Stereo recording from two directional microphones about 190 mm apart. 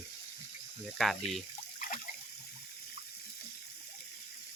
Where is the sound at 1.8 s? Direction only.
45° left (ahead or behind).